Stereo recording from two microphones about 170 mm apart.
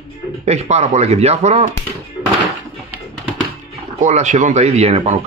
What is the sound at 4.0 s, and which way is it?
A man's voice, 45° right (ahead or behind).